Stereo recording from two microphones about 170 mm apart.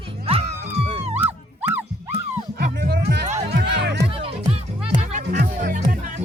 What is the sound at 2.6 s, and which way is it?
Music, 65° right (ahead or behind).